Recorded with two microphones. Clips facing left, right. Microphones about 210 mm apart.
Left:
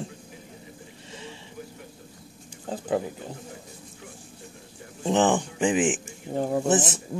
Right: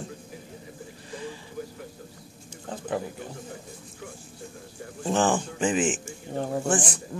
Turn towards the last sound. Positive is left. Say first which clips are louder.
# left 3 dB
turn(degrees=25)  # may be behind; listen again after turning